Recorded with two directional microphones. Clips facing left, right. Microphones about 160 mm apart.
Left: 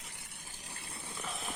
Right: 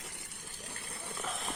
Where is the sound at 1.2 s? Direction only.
Centre (ahead or behind).